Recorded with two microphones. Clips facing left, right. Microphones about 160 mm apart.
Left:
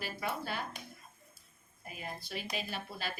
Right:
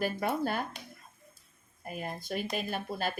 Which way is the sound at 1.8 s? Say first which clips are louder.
Right 6 dB; 50° right (ahead or behind).